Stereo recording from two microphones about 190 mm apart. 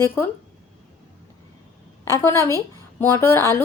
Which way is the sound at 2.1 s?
15° left (ahead or behind).